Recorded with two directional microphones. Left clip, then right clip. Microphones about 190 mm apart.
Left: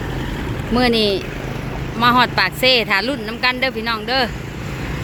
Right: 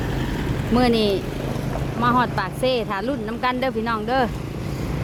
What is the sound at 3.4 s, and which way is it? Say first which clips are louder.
Speech: left 4 dB; 15° right (ahead or behind).